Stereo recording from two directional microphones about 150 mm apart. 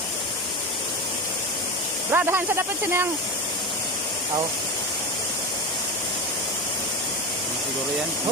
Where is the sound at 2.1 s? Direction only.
15° right (ahead or behind).